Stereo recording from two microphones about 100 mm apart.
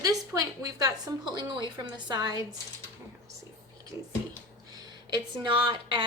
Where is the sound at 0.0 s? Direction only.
35° right (ahead or behind).